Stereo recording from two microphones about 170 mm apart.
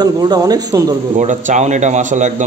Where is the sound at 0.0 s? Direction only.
25° right (ahead or behind).